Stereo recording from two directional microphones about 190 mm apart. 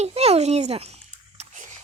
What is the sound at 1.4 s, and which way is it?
Biting, 40° right (ahead or behind).